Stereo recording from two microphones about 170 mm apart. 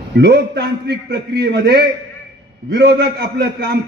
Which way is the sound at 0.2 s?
70° right (ahead or behind).